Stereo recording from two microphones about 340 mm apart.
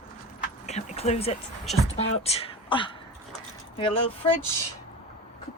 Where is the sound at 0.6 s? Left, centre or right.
Centre.